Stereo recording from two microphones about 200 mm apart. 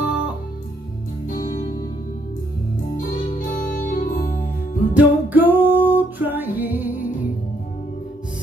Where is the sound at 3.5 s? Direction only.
45° left (ahead or behind).